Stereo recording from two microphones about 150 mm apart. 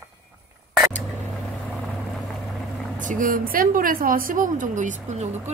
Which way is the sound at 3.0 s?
60° right (ahead or behind).